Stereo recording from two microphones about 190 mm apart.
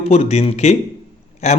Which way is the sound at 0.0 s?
35° left (ahead or behind).